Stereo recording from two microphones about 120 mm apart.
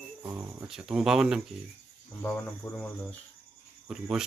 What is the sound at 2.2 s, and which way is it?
Speech, 15° left (ahead or behind).